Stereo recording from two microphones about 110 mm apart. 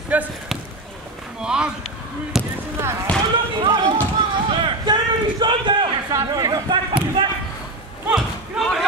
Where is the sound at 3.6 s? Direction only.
45° right (ahead or behind).